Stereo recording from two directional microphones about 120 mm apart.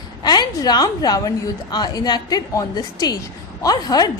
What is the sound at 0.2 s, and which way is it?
A woman's voice, 35° left (ahead or behind).